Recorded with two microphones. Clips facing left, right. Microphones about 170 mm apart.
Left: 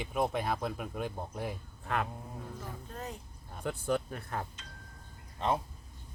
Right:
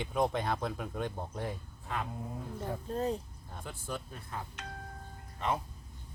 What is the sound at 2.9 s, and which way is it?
Speech, 30° right (ahead or behind).